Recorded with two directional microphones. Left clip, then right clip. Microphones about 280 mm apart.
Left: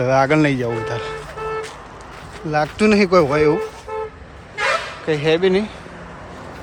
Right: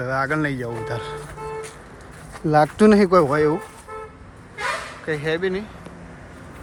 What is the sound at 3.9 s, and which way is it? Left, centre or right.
Vehicle, left.